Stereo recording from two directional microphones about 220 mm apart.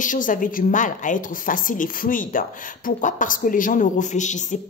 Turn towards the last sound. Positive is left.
turn(degrees=35)  # may be behind; listen again after turning